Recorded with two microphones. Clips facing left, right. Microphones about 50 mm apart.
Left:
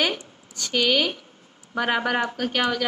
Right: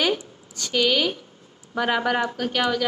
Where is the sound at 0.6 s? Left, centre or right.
Centre.